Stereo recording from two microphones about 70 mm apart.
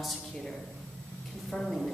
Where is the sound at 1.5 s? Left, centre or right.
Centre.